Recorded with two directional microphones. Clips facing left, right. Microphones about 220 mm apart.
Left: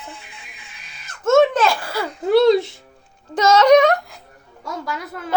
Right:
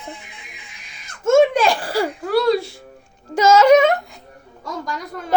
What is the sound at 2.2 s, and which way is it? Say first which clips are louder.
Speech: left 6 dB; 25° left (ahead or behind).